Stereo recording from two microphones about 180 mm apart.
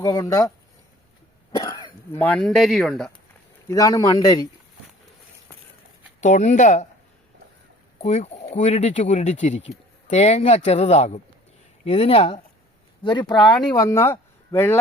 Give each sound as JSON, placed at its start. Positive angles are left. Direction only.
{"t": 0.0, "sound": "a man's voice", "side_deg": 20}
{"t": 1.5, "sound": "cough", "side_deg": 25}
{"t": 2.1, "sound": "speech", "side_deg": 10}
{"t": 3.7, "sound": "a man's voice", "side_deg": 20}
{"t": 6.1, "sound": "speech", "side_deg": 40}
{"t": 7.9, "sound": "a man's voice", "side_deg": 40}